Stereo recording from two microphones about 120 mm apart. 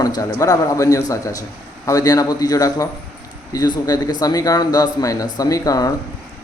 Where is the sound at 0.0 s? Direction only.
30° left (ahead or behind).